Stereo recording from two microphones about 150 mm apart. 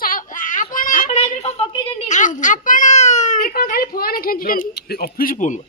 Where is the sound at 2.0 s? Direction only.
55° left (ahead or behind).